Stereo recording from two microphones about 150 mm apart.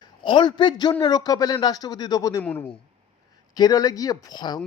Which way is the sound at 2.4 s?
10° left (ahead or behind).